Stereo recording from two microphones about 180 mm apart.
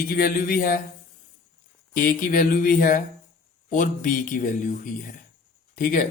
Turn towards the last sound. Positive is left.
turn(degrees=50)  # may be behind; listen again after turning